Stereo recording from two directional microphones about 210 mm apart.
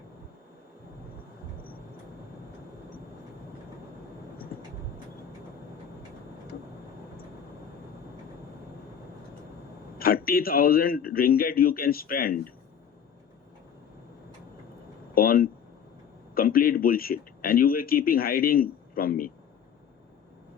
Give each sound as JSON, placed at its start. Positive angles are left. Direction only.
{"t": 10.0, "sound": "speech", "side_deg": 45}
{"t": 15.1, "sound": "speech", "side_deg": 45}